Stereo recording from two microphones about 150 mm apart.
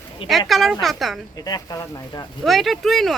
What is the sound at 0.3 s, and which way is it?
Speech, centre (ahead or behind).